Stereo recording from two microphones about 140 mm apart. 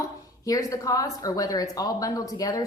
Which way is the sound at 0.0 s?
25° left (ahead or behind).